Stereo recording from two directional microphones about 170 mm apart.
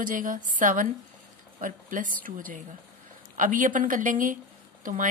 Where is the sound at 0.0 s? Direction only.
50° right (ahead or behind).